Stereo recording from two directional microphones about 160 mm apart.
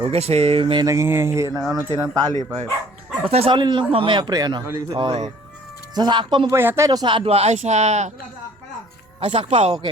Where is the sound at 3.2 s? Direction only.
35° right (ahead or behind); by 4.9 s 15° right (ahead or behind).